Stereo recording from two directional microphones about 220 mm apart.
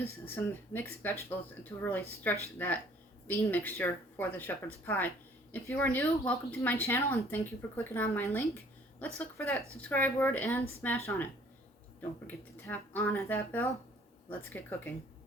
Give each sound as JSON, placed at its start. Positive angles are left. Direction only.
{"t": 0.0, "sound": "speech", "side_deg": 10}
{"t": 12.3, "sound": "speech", "side_deg": 10}